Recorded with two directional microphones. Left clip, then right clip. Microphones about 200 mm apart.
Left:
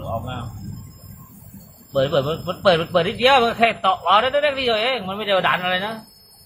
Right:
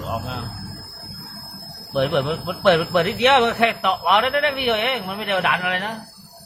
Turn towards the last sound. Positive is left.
turn(degrees=25)  # may be behind; listen again after turning